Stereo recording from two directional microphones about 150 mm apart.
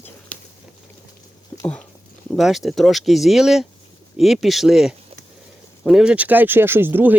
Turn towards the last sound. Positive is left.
turn(degrees=-10)  # may be behind; listen again after turning